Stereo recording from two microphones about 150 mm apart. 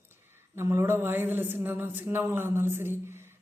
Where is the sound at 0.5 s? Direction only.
15° right (ahead or behind).